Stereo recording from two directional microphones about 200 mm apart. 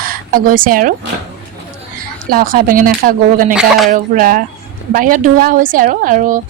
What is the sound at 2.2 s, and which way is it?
Speech, 45° right (ahead or behind).